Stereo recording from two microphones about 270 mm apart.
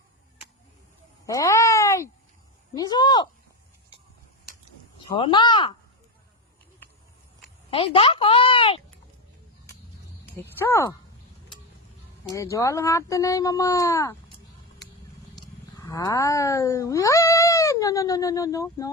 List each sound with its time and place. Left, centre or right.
1.3 s a sound: centre
2.7 s speech: centre
5.1 s speech: centre
7.7 s a woman's voice: centre
10.4 s speech: centre
12.3 s speech: centre
15.4 s cat: centre